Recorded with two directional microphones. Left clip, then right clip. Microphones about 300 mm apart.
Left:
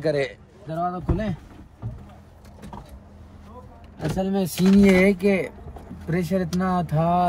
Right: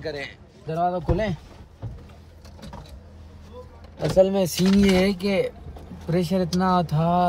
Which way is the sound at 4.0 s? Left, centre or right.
Right.